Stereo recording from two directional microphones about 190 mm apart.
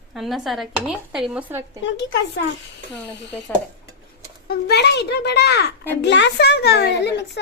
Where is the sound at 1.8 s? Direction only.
65° left (ahead or behind).